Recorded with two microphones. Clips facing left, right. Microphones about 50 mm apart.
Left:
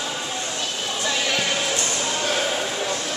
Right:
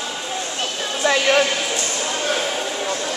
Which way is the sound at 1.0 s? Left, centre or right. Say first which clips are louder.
Right 9 dB; right.